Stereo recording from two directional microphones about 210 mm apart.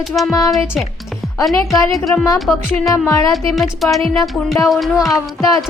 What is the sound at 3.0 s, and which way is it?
Speech, 15° left (ahead or behind).